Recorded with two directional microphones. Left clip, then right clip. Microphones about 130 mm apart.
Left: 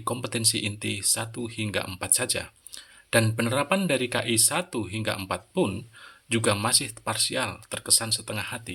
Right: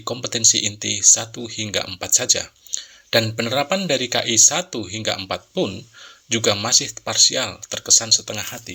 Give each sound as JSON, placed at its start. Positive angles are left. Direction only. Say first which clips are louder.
{"t": 0.0, "sound": "speech", "louder": "right 8 dB", "side_deg": 25}